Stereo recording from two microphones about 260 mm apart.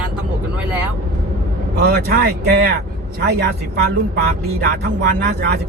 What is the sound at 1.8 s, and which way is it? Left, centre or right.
Speech, right.